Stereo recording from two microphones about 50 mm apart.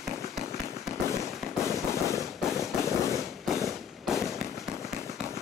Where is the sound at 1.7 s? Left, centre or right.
Left.